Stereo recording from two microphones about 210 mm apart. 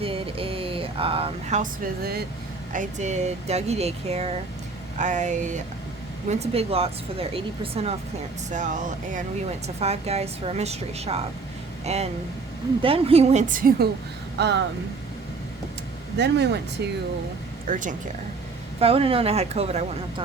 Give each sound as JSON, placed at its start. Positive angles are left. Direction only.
{"t": 0.0, "sound": "a sound", "side_deg": -25}
{"t": 2.0, "sound": "speech", "side_deg": -45}
{"t": 2.7, "sound": "speech", "side_deg": -35}
{"t": 14.3, "sound": "speech", "side_deg": -55}
{"t": 16.1, "sound": "speech", "side_deg": -55}
{"t": 17.7, "sound": "speech", "side_deg": -40}
{"t": 18.8, "sound": "speech", "side_deg": -30}